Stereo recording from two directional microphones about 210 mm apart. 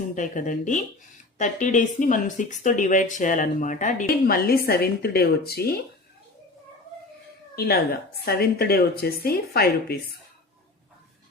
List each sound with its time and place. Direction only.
0.2 s speech: 40° left (ahead or behind)
7.5 s a woman's voice: 45° left (ahead or behind)